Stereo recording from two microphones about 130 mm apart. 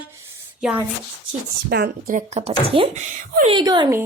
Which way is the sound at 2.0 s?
70° right (ahead or behind).